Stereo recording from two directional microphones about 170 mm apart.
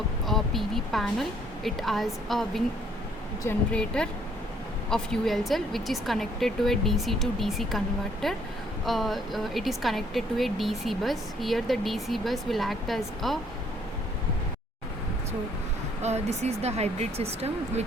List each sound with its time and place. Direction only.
0.3 s speech: centre (ahead or behind)
3.7 s speech: 5° left (ahead or behind)
16.0 s speech: 40° right (ahead or behind)